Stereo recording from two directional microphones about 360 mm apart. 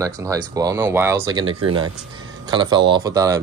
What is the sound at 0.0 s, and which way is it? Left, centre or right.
Speech, centre.